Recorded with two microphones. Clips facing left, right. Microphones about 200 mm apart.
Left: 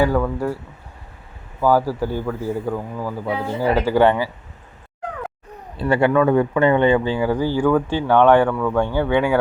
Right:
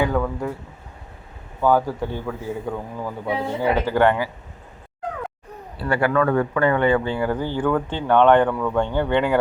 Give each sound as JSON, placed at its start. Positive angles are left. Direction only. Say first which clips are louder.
{"t": 0.0, "sound": "a man's voice", "louder": "left 3 dB", "side_deg": 5}
{"t": 1.6, "sound": "a man's voice", "louder": "left 2 dB", "side_deg": 5}
{"t": 5.7, "sound": "speech", "louder": "left 4 dB", "side_deg": 20}